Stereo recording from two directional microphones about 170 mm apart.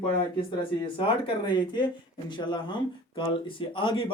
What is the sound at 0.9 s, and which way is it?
Speech, 30° left (ahead or behind).